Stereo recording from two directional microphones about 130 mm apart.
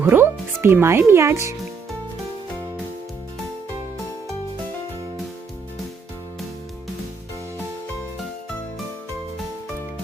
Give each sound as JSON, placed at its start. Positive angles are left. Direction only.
{"t": 0.0, "sound": "speech", "side_deg": -20}